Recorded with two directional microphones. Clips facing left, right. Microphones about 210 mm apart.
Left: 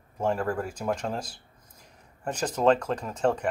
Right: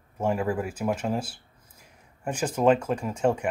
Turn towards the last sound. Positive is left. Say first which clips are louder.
# right 1 dB
turn(degrees=-10)  # may be behind; listen again after turning